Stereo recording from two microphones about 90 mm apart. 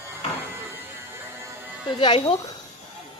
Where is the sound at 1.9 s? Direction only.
70° left (ahead or behind).